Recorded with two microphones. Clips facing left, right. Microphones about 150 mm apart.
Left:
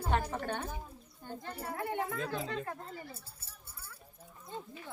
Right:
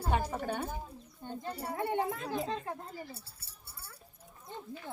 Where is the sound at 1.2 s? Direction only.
20° right (ahead or behind).